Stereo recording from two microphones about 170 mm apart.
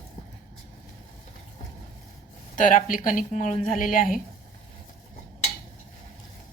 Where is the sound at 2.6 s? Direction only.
50° left (ahead or behind).